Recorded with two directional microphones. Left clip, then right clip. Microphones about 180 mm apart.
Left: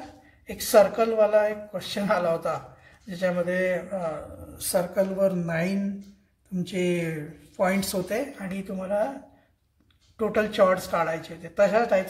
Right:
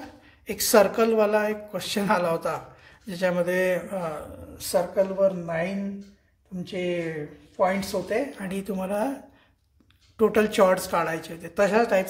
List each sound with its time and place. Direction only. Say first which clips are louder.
0.5 s a woman's voice: even; 20° right (ahead or behind)
4.6 s speech: right 1 dB; centre (ahead or behind)
8.4 s a woman's voice: right 3 dB; 20° right (ahead or behind)
10.1 s a woman's voice: right 3 dB; 20° right (ahead or behind)